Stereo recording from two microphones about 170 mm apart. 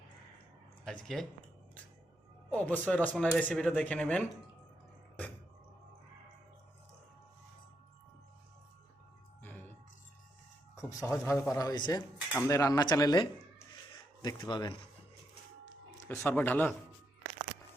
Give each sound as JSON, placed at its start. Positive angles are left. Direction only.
{"t": 0.9, "sound": "speech", "side_deg": 5}
{"t": 2.5, "sound": "speech", "side_deg": 10}
{"t": 10.8, "sound": "speech", "side_deg": 20}
{"t": 16.0, "sound": "speech", "side_deg": 10}